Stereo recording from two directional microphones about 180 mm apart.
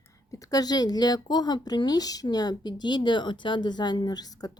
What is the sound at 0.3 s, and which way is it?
Speech, 20° left (ahead or behind).